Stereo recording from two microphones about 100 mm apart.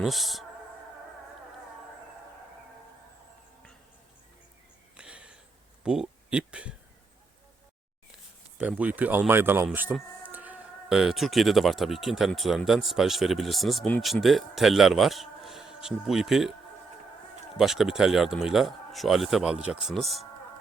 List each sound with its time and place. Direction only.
0.0 s speech: centre (ahead or behind)
4.9 s a sound: 10° right (ahead or behind)
5.8 s speech: 10° right (ahead or behind)
8.5 s speech: 10° right (ahead or behind)
10.2 s a sound: 15° right (ahead or behind)
10.8 s speech: 5° right (ahead or behind)
17.6 s speech: 5° right (ahead or behind)